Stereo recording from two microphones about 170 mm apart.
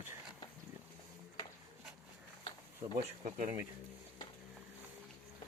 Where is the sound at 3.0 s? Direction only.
45° right (ahead or behind).